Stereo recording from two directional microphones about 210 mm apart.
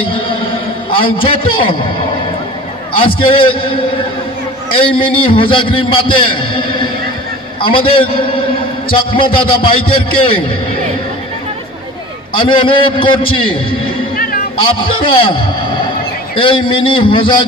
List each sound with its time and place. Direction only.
0.8 s a man's voice: 25° left (ahead or behind)
3.2 s a man's voice: 25° left (ahead or behind)
12.4 s a man's voice: 25° left (ahead or behind)
14.1 s a sound: 45° left (ahead or behind)
14.6 s a man's voice: 25° left (ahead or behind)
16.3 s a man's voice: 25° left (ahead or behind)